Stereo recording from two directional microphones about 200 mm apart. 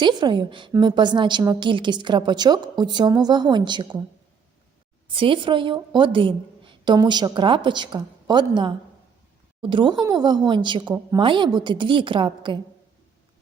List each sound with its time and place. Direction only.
0.0 s a woman's voice: 20° right (ahead or behind)
5.0 s a woman's voice: 25° right (ahead or behind)